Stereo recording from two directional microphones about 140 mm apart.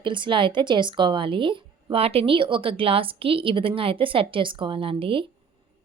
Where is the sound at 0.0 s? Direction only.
35° right (ahead or behind).